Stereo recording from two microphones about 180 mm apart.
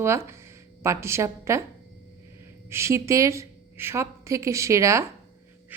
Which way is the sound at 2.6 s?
15° right (ahead or behind).